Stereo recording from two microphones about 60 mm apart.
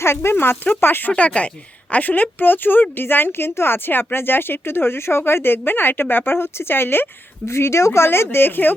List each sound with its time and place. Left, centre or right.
0.0 s speech: left
1.1 s speech: left